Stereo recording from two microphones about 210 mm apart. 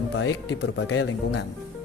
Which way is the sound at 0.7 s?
85° left.